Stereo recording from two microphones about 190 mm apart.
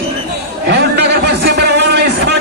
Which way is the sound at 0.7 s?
60° right (ahead or behind).